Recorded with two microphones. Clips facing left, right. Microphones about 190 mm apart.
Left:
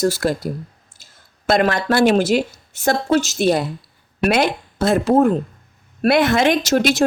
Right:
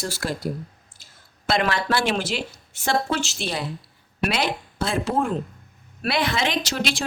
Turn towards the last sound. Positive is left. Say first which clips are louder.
# left 9 dB
turn(degrees=45)  # may be behind; listen again after turning